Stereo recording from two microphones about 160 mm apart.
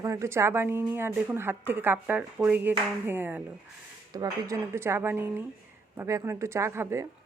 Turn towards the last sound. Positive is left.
turn(degrees=-15)  # may be behind; listen again after turning